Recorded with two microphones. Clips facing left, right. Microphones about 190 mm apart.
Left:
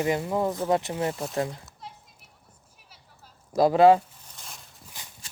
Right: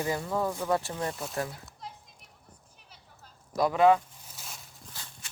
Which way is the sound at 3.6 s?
30° left (ahead or behind).